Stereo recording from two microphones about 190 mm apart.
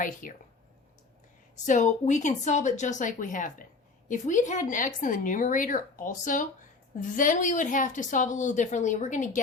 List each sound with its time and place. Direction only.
0.0 s speech: 45° left (ahead or behind)
1.6 s a woman's voice: 40° left (ahead or behind)